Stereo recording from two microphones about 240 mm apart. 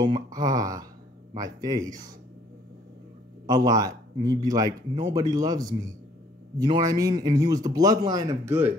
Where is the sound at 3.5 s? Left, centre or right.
Centre.